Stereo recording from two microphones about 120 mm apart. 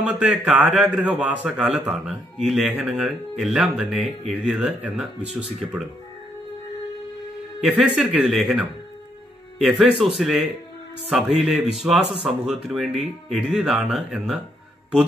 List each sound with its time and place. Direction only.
0.0 s a man's voice: 10° right (ahead or behind)
7.6 s speech: 5° right (ahead or behind)